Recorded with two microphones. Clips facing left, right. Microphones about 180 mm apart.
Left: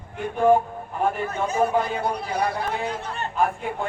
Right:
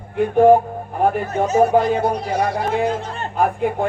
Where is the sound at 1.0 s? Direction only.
40° right (ahead or behind).